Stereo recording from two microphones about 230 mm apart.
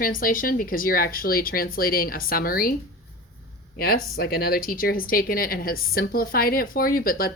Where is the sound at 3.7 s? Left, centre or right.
Left.